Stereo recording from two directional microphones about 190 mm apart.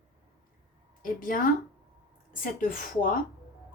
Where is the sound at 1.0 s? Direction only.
45° left (ahead or behind).